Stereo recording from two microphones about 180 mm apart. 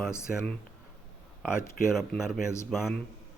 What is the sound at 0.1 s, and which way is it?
Speech, 15° left (ahead or behind).